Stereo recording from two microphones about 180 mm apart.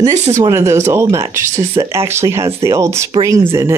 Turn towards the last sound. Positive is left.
turn(degrees=-15)  # may be behind; listen again after turning